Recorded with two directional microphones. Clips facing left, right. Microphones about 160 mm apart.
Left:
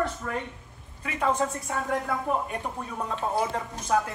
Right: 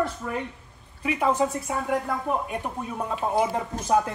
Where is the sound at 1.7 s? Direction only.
5° right (ahead or behind).